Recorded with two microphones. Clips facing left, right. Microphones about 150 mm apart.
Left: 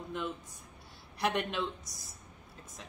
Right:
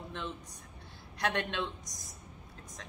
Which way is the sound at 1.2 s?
5° left (ahead or behind).